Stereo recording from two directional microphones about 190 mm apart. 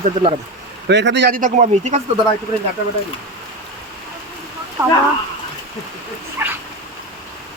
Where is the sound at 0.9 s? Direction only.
65° right (ahead or behind).